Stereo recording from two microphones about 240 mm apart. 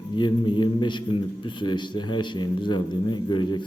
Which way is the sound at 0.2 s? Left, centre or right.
Centre.